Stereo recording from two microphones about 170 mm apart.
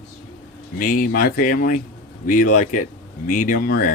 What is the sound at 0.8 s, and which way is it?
Speech, 50° left (ahead or behind).